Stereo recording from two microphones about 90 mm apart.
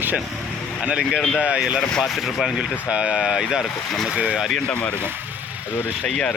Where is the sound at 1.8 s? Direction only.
Centre (ahead or behind).